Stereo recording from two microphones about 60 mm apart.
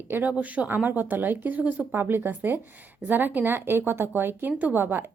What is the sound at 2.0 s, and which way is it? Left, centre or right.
Speech, right.